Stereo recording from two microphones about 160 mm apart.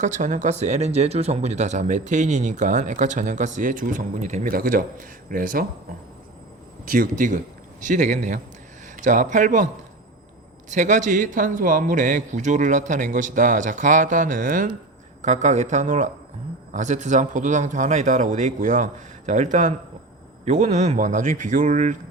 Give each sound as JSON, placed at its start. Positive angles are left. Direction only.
{"t": 0.0, "sound": "speech", "side_deg": -50}
{"t": 4.5, "sound": "speech", "side_deg": -60}
{"t": 6.8, "sound": "speech", "side_deg": -55}
{"t": 10.7, "sound": "speech", "side_deg": -50}